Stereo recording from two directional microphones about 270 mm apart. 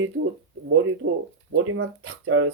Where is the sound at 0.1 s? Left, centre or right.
Right.